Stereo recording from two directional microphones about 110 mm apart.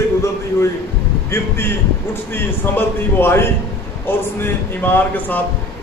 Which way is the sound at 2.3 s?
20° left (ahead or behind).